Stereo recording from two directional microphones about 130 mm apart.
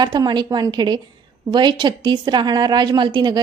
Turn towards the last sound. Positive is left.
turn(degrees=-35)  # may be behind; listen again after turning